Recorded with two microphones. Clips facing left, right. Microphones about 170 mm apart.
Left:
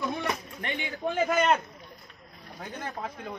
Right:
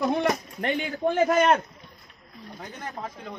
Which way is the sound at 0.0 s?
55° right (ahead or behind).